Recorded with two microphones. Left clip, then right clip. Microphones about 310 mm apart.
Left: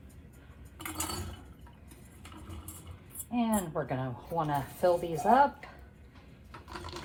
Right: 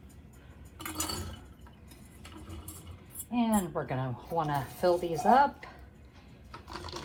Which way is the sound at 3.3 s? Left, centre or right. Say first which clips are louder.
Right 1 dB; centre.